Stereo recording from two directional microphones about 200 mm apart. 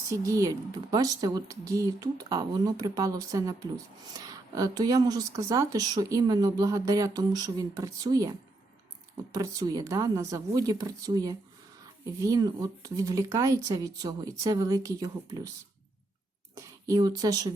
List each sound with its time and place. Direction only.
0.1 s speech: 15° right (ahead or behind)
16.6 s speech: 15° right (ahead or behind)